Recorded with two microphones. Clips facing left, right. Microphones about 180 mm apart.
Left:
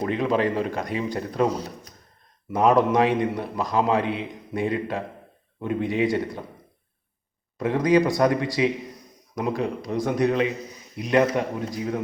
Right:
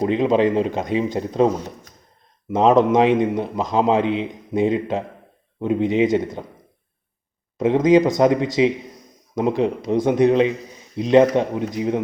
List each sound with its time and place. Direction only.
0.0 s a man's voice: 20° right (ahead or behind)
7.6 s a man's voice: 20° right (ahead or behind)